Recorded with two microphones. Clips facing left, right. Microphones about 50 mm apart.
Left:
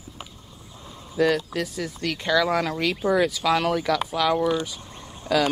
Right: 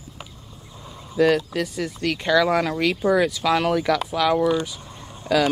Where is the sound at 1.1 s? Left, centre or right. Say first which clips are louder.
Right 3 dB; centre.